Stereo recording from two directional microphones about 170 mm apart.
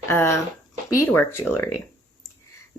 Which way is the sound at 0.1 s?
15° left (ahead or behind).